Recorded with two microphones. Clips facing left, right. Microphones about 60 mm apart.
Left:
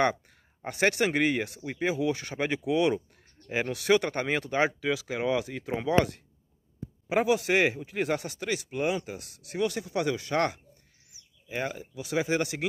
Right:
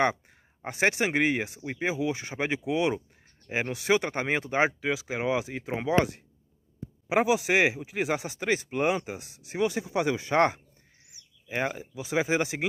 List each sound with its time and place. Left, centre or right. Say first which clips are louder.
0.0 s speech: even; centre
9.0 s speech: right 2 dB; right
11.6 s speech: right 3 dB; right